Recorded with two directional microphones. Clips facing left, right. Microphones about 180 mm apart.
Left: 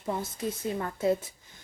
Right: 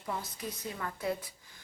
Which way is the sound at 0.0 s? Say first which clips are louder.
Left 6 dB; 30° left (ahead or behind).